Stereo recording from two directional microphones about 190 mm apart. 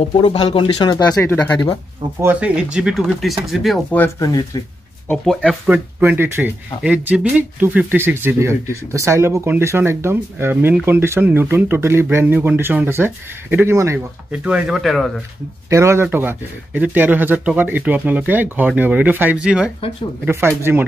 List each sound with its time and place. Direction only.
0.0 s speech: 30° left (ahead or behind)
1.2 s speech: 10° left (ahead or behind)
2.2 s speech: 5° right (ahead or behind)
4.0 s speech: 20° left (ahead or behind)
5.0 s speech: 5° left (ahead or behind)
15.7 s speech: 15° right (ahead or behind)